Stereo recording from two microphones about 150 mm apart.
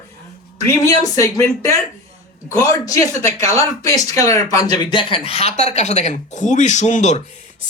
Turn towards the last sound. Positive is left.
turn(degrees=50)  # may be behind; listen again after turning